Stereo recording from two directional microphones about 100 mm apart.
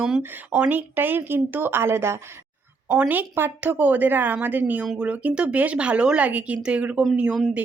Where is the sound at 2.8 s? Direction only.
15° right (ahead or behind).